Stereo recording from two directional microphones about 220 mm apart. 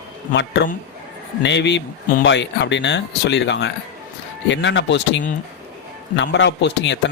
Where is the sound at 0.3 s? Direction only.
50° left (ahead or behind).